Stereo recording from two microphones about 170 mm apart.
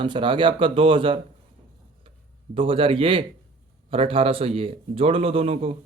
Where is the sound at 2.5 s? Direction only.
35° right (ahead or behind).